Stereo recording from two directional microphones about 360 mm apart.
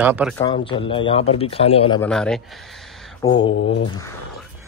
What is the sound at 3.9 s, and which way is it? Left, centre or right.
Speech, centre.